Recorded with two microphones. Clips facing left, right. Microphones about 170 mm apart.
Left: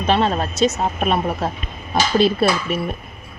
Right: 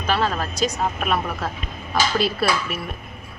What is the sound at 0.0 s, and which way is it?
A woman's voice, 25° left (ahead or behind).